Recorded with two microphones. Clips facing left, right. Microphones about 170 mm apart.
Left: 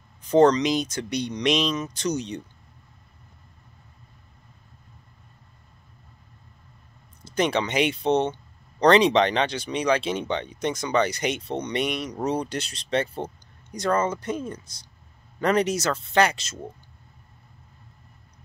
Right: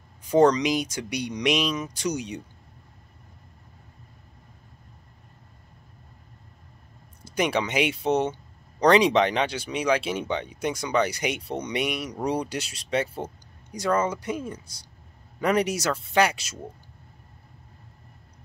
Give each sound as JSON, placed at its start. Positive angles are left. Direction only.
{"t": 0.2, "sound": "speech", "side_deg": -10}
{"t": 7.2, "sound": "speech", "side_deg": -10}